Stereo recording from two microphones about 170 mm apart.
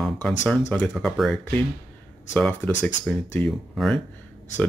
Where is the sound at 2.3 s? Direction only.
5° left (ahead or behind).